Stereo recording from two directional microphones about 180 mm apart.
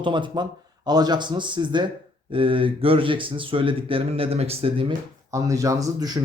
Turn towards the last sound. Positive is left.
turn(degrees=-20)  # may be behind; listen again after turning